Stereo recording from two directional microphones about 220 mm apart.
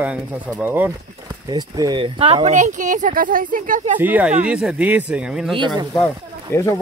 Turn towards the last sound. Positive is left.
turn(degrees=10)  # may be behind; listen again after turning